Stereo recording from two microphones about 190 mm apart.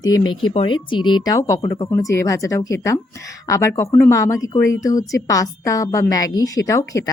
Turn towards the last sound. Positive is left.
turn(degrees=15)  # may be behind; listen again after turning